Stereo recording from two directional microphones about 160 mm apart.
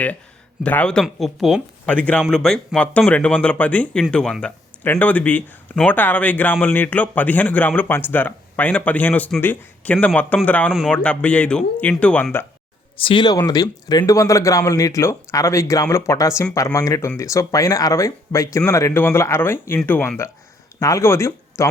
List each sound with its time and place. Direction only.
0.6 s speech: 10° left (ahead or behind)
13.0 s speech: 30° left (ahead or behind)